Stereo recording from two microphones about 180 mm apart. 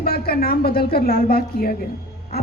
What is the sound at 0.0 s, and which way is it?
A woman's voice, 55° left (ahead or behind).